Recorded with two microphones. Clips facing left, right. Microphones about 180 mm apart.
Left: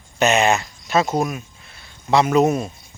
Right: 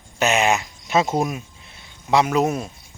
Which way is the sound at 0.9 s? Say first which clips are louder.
Left 1 dB; 25° right (ahead or behind).